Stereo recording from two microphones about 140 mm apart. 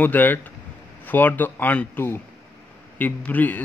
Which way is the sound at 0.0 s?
10° left (ahead or behind).